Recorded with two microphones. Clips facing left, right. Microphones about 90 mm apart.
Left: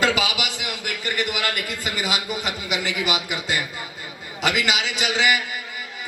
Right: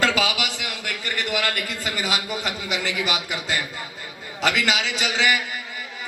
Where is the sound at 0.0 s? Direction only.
15° left (ahead or behind).